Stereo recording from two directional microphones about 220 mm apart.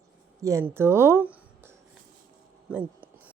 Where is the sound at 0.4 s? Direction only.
10° right (ahead or behind).